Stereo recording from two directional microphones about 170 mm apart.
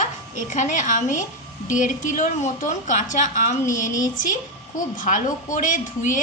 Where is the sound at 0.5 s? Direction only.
45° left (ahead or behind).